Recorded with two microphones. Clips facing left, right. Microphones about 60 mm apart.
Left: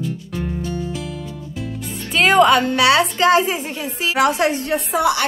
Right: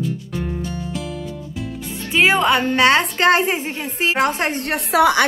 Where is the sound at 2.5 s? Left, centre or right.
Right.